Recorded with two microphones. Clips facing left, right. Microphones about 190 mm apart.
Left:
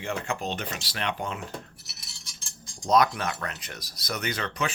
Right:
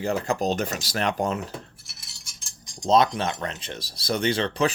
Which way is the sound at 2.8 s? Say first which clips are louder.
Right 3 dB; 25° right (ahead or behind).